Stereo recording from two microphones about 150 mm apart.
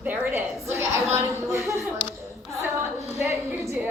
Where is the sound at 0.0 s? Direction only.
10° right (ahead or behind).